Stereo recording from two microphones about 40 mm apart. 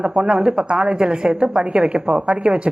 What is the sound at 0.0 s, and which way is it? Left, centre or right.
A woman's voice, right.